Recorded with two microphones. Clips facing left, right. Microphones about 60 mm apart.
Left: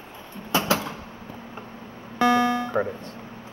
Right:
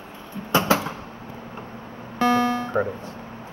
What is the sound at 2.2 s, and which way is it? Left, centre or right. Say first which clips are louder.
Music: even; right.